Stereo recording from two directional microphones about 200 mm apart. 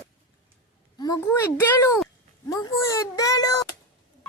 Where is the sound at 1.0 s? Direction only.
15° left (ahead or behind).